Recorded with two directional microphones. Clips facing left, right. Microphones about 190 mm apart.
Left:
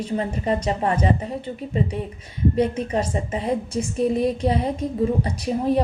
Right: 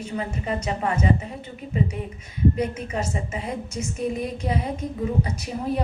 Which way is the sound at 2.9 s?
35° left (ahead or behind).